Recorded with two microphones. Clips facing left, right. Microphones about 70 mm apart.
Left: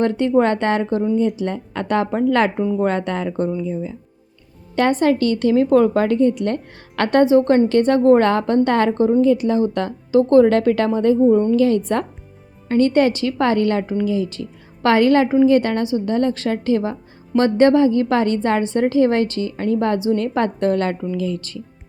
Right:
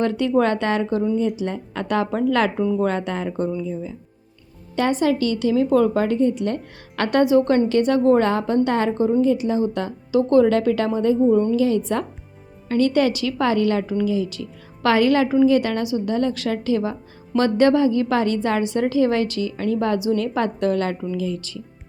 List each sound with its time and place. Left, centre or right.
0.0 s a woman's voice: left
4.7 s a woman's voice: left
10.1 s a woman's voice: left
12.6 s a woman's voice: left